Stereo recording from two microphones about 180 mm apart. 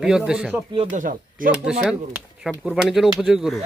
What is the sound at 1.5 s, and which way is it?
Speech, 5° right (ahead or behind).